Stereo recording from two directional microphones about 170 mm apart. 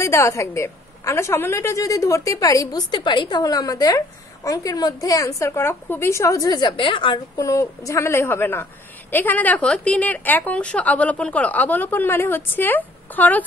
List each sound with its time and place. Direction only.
0.0 s a woman's voice: 15° left (ahead or behind)
7.3 s a woman's voice: 15° left (ahead or behind)